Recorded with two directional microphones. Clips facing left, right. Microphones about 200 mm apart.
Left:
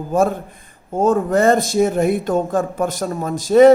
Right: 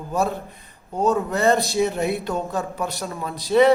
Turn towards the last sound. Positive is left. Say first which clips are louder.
# left 7 dB
turn(degrees=45)  # may be behind; listen again after turning